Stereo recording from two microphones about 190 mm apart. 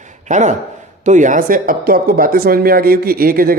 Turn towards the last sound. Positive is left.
turn(degrees=-50)  # may be behind; listen again after turning